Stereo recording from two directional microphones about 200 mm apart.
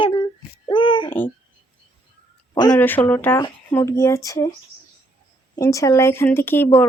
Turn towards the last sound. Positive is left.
turn(degrees=10)  # may be behind; listen again after turning